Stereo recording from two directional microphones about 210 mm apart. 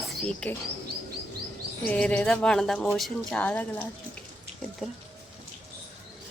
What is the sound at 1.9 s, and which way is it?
Speech, 5° left (ahead or behind).